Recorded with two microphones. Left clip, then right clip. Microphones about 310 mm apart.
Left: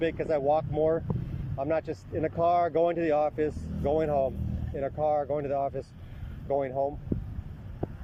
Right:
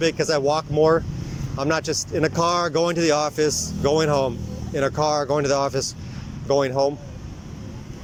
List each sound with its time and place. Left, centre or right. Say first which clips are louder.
0.0 s speech: right 7 dB; right